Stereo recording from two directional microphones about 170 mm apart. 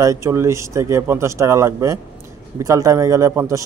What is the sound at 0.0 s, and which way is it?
A man's voice, 20° right (ahead or behind).